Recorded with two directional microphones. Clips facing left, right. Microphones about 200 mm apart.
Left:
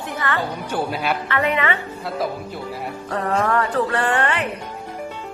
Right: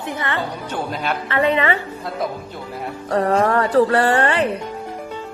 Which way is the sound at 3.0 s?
35° right (ahead or behind).